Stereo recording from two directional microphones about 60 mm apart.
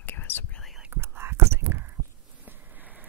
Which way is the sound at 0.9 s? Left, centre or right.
Right.